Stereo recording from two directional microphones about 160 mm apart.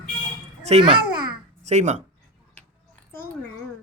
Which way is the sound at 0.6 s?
35° right (ahead or behind).